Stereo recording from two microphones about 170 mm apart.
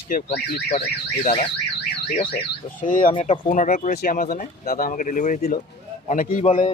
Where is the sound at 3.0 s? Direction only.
35° left (ahead or behind).